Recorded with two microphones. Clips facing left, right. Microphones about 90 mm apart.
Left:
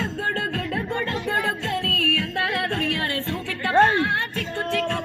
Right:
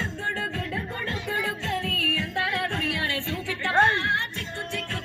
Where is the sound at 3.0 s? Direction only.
40° left (ahead or behind).